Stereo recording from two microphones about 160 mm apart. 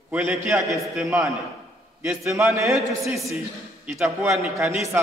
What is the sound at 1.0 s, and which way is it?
A man's voice, centre (ahead or behind).